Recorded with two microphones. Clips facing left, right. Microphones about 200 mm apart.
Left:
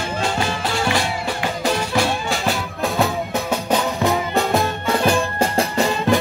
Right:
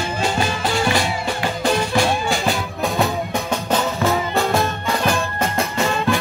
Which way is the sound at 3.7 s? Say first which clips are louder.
Even; 15° left (ahead or behind).